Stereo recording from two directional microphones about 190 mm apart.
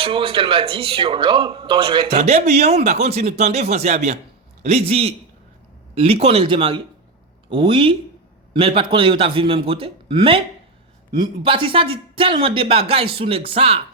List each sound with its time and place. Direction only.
0.0 s a man's voice: 25° right (ahead or behind)